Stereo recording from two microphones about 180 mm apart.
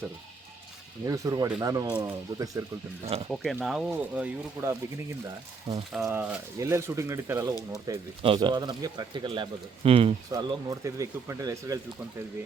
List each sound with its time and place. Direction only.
1.0 s speech: 20° right (ahead or behind)
3.0 s speech: 35° right (ahead or behind)
3.4 s speech: centre (ahead or behind)
5.2 s speech: 20° right (ahead or behind)
10.3 s speech: 20° right (ahead or behind)